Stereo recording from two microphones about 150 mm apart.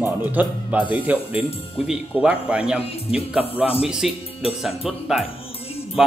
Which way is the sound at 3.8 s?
5° right (ahead or behind).